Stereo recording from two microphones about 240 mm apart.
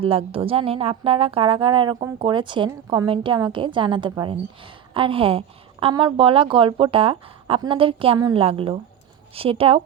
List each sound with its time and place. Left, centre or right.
0.0 s speech: right